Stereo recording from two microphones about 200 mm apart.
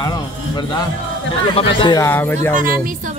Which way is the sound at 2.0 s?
10° left (ahead or behind).